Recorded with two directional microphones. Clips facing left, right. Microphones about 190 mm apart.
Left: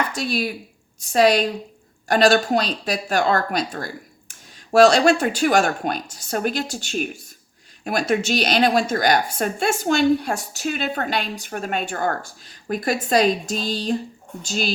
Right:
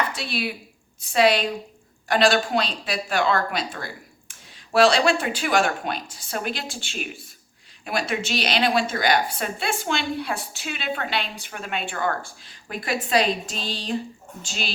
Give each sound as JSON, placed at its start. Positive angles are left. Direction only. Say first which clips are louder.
{"t": 0.1, "sound": "a woman's voice", "louder": "left 5 dB", "side_deg": 45}